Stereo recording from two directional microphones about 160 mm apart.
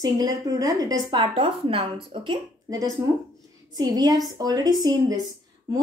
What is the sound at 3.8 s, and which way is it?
A woman's voice, 25° right (ahead or behind).